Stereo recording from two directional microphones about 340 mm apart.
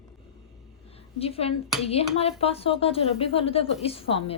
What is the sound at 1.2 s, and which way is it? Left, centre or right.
A woman's voice, centre.